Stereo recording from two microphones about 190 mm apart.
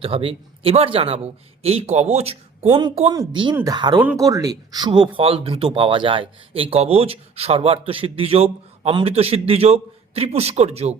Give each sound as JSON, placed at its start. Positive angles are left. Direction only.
{"t": 0.0, "sound": "speech", "side_deg": -30}